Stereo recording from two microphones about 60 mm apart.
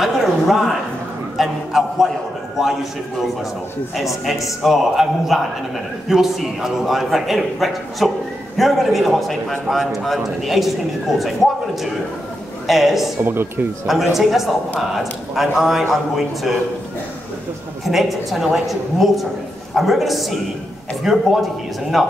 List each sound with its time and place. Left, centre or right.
0.0 s a sound: centre
1.3 s a man's voice: centre
4.3 s a man's voice: centre
13.2 s speech: right
13.8 s a man's voice: centre
17.8 s a man's voice: centre